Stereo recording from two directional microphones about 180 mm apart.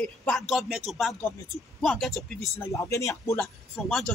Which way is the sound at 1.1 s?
15° left (ahead or behind).